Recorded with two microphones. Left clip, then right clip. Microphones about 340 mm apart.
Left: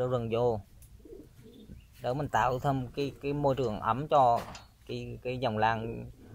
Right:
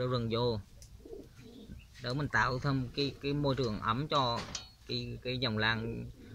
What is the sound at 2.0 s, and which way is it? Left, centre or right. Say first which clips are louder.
Speech: left 3 dB; centre.